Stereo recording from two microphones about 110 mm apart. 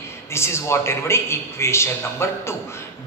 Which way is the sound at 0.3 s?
25° left (ahead or behind).